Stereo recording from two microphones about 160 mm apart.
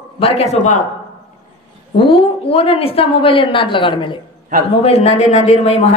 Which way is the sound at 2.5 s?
35° left (ahead or behind).